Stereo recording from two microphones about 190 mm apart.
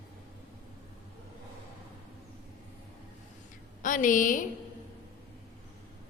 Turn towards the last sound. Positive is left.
turn(degrees=45)  # may be behind; listen again after turning